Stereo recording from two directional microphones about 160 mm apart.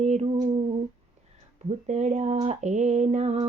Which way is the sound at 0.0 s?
45° right (ahead or behind).